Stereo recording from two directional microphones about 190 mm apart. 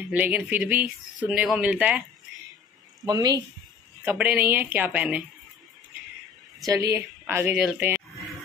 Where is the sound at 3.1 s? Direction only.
20° right (ahead or behind).